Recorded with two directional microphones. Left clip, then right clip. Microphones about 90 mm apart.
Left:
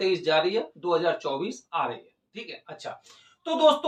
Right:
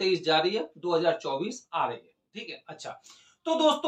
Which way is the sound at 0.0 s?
30° right (ahead or behind).